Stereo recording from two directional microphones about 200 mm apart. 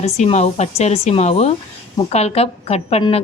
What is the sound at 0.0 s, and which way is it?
Speech, 35° left (ahead or behind).